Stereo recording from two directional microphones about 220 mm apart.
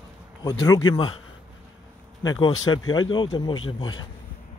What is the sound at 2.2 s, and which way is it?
Speech, 20° left (ahead or behind).